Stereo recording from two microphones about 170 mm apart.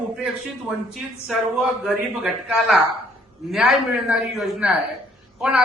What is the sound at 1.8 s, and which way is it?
A man's voice, centre (ahead or behind).